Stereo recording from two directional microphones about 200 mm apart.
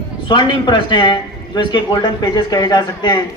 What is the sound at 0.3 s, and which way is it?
A man's voice, 25° left (ahead or behind).